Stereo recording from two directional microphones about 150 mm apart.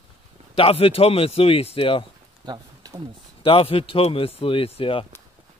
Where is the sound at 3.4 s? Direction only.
35° left (ahead or behind).